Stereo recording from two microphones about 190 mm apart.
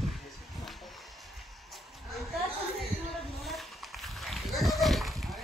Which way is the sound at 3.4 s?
Centre (ahead or behind).